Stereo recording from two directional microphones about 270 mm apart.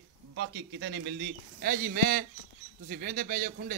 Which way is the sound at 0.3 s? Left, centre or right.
Right.